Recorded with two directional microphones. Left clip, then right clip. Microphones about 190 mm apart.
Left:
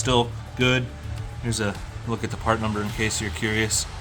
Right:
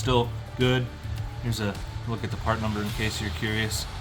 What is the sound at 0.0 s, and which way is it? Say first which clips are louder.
Speech: left 3 dB; 40° left (ahead or behind).